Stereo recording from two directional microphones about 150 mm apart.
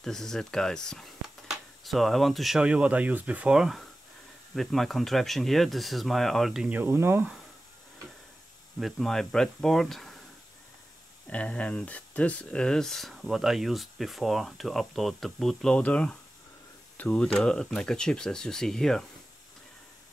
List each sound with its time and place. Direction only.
0.0 s speech: 5° left (ahead or behind); by 7.2 s 15° right (ahead or behind)
8.7 s speech: centre (ahead or behind)
11.2 s speech: 10° left (ahead or behind)